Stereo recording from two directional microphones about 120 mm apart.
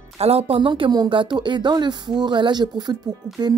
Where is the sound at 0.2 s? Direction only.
55° right (ahead or behind).